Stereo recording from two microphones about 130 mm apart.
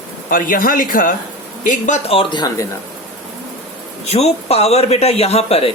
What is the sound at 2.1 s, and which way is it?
Speech, 45° left (ahead or behind).